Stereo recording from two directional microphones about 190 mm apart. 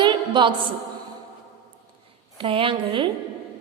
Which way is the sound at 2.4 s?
30° right (ahead or behind).